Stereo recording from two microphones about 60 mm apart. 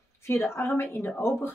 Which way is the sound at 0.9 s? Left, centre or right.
Left.